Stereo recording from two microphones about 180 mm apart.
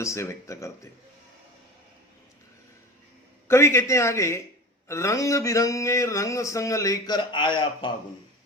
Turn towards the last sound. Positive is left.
turn(degrees=25)  # may be behind; listen again after turning